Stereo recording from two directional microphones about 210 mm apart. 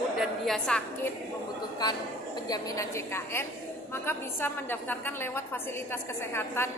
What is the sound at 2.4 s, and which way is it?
A woman's voice, 15° left (ahead or behind).